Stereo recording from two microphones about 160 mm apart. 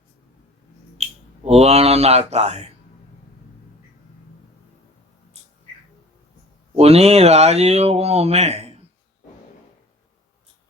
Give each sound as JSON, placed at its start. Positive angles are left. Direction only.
{"t": 1.0, "sound": "finger snapping", "side_deg": -40}
{"t": 1.5, "sound": "speech", "side_deg": -40}
{"t": 6.7, "sound": "speech", "side_deg": -40}